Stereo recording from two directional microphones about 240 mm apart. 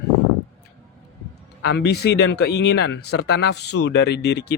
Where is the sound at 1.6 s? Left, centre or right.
Left.